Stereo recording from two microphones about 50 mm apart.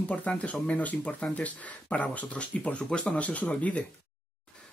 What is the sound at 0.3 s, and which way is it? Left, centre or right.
Speech, left.